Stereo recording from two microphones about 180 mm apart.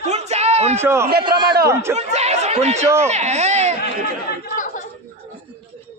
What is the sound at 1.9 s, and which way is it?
Speech, 35° right (ahead or behind).